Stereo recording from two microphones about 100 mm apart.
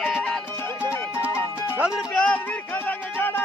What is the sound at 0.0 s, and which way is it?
Music, 5° left (ahead or behind).